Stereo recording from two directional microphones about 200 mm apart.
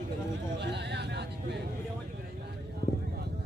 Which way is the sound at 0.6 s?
60° right (ahead or behind).